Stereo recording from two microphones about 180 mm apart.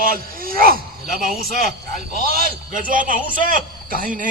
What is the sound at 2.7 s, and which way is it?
Speech, 50° right (ahead or behind).